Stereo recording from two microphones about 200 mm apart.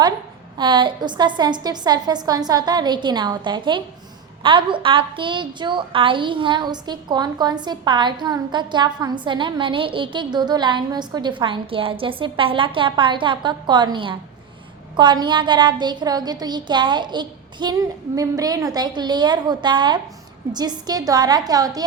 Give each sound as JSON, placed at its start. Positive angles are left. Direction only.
{"t": 0.5, "sound": "a woman's voice", "side_deg": -25}